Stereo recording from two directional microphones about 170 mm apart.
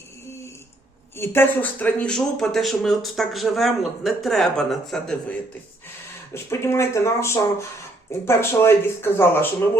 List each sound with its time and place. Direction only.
1.1 s speech: 15° left (ahead or behind)
6.3 s speech: 15° left (ahead or behind)